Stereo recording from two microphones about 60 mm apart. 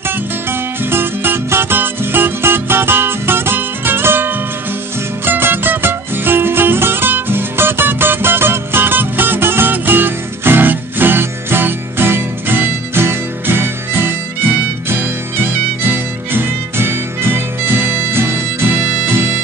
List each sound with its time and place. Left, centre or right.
0.5 s music: right
15.8 s music: right